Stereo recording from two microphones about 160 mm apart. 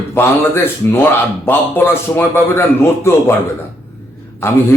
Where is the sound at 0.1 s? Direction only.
15° left (ahead or behind).